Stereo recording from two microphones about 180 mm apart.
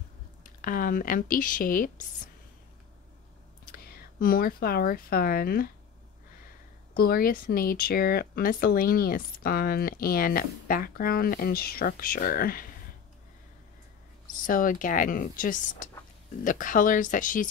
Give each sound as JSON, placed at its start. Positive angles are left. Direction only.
{"t": 0.4, "sound": "speech", "side_deg": 50}
{"t": 3.7, "sound": "speech", "side_deg": 55}
{"t": 7.0, "sound": "speech", "side_deg": 55}
{"t": 14.4, "sound": "speech", "side_deg": 50}